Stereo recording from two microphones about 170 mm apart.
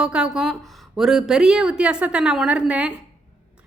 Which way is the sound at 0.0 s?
5° right (ahead or behind).